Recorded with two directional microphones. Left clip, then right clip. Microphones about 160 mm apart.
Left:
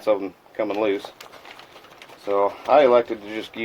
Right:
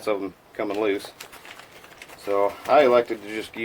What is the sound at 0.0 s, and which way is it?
Speech, 10° left (ahead or behind).